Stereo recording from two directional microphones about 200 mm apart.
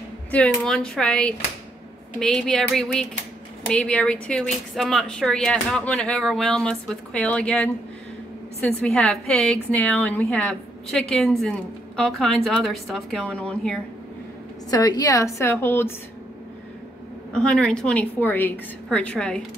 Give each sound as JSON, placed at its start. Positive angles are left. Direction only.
{"t": 0.3, "sound": "a woman's voice", "side_deg": 5}
{"t": 14.7, "sound": "a woman's voice", "side_deg": 20}
{"t": 17.3, "sound": "a woman's voice", "side_deg": 5}